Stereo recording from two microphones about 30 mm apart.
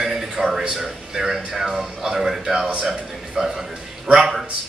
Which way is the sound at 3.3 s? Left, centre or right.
Centre.